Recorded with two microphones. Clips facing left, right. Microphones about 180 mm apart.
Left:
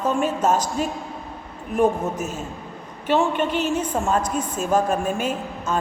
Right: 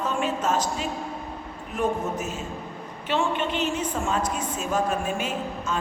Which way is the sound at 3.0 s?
45° left (ahead or behind).